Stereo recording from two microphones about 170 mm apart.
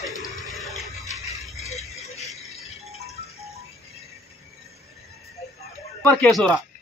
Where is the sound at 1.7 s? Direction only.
Centre (ahead or behind).